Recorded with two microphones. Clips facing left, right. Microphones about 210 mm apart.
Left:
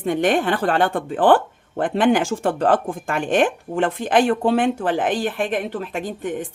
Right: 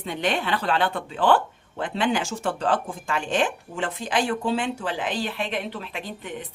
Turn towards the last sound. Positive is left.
turn(degrees=45)  # may be behind; listen again after turning